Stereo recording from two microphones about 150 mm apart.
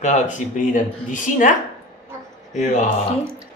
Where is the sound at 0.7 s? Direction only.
60° left (ahead or behind).